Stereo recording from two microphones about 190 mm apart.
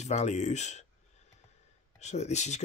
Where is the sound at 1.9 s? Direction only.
35° left (ahead or behind).